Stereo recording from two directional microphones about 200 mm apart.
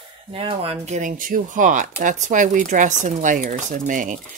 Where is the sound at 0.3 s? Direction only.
25° right (ahead or behind).